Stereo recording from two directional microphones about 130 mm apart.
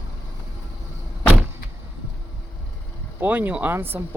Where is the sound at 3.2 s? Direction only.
15° right (ahead or behind).